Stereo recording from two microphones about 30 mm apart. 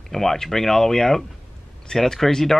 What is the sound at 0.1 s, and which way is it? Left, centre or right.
Speech, centre.